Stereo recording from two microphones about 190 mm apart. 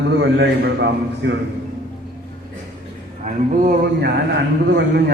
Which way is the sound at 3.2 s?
45° right (ahead or behind).